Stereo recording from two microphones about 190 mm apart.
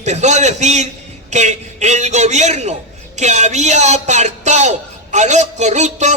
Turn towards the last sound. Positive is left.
turn(degrees=-40)  # may be behind; listen again after turning